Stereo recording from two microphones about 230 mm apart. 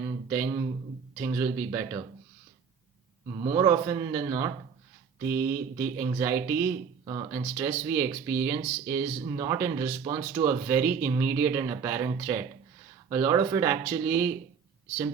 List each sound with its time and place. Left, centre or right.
1.2 s speech: centre
3.3 s speech: right
10.4 s speech: centre